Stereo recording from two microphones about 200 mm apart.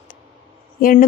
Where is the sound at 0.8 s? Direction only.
45° left (ahead or behind).